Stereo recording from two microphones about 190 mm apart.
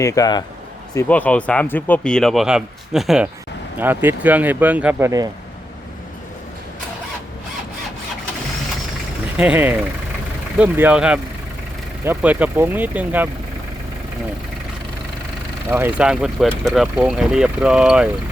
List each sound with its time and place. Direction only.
0.0 s a man's voice: 15° left (ahead or behind)
0.9 s speech: 10° left (ahead or behind); by 5.3 s 15° right (ahead or behind)
9.4 s speech: 10° right (ahead or behind)
15.7 s speech: 10° right (ahead or behind)